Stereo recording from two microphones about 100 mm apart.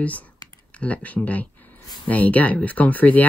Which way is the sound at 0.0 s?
15° left (ahead or behind).